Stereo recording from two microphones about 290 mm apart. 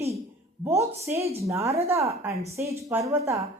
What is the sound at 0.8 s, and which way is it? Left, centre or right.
A woman's voice, centre.